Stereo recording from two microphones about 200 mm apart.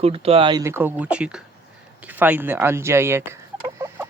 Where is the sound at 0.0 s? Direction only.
30° right (ahead or behind).